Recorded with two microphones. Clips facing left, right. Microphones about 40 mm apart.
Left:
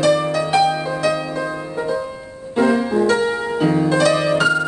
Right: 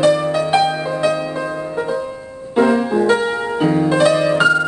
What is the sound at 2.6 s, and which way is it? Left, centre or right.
Music, centre.